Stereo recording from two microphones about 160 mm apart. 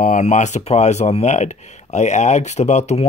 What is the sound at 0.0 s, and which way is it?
Speech, 50° left (ahead or behind).